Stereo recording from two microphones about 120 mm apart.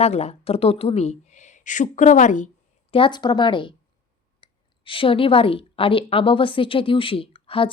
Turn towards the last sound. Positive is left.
turn(degrees=50)  # may be behind; listen again after turning